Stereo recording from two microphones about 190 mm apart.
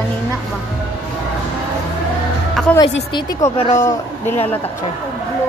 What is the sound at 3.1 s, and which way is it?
Speech, 25° left (ahead or behind).